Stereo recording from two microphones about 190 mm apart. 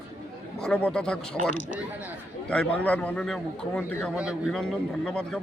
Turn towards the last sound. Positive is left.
turn(degrees=0)  # may be behind; listen again after turning